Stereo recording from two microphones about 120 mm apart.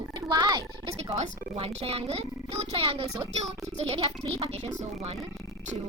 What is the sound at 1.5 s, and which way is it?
Speech, 55° right (ahead or behind).